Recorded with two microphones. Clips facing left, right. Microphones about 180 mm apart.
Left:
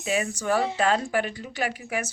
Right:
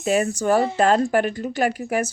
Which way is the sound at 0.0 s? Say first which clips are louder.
Right 7 dB; 45° right (ahead or behind).